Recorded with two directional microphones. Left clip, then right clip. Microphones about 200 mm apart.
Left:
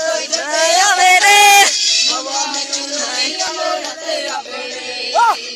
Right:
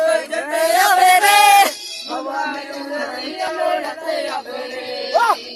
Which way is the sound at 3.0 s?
5° right (ahead or behind).